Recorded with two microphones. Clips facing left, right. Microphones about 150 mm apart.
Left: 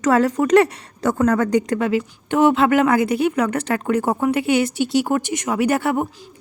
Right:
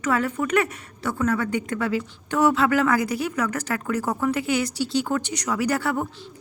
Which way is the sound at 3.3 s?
65° left (ahead or behind).